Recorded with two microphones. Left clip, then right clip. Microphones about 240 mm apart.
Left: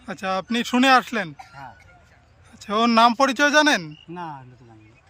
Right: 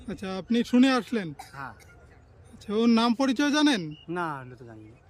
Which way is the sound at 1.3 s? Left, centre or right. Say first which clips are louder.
Even; centre.